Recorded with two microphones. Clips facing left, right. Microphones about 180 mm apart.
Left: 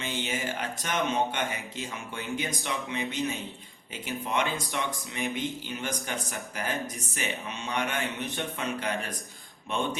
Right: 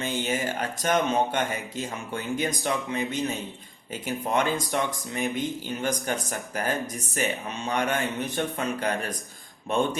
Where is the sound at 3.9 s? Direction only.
40° right (ahead or behind).